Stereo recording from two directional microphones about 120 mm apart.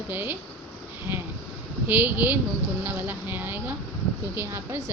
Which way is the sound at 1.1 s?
15° right (ahead or behind).